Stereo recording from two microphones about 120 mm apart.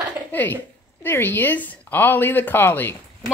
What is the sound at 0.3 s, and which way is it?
Speech, 15° left (ahead or behind).